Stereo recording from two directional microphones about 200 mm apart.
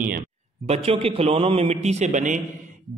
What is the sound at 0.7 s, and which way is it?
A man's voice, 30° right (ahead or behind).